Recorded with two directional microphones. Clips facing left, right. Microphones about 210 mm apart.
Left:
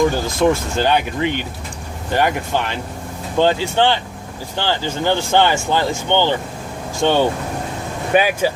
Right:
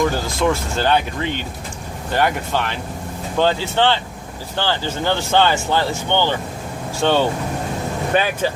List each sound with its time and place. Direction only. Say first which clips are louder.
0.1 s speech: left 3 dB; 15° left (ahead or behind)